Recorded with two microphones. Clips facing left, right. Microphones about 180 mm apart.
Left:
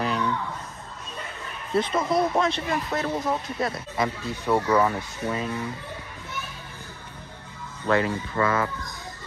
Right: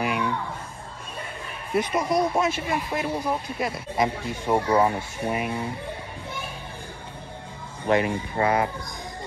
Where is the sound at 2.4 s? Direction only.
15° right (ahead or behind).